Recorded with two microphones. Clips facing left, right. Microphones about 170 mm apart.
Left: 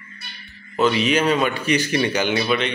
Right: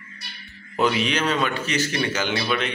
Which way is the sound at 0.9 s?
5° left (ahead or behind).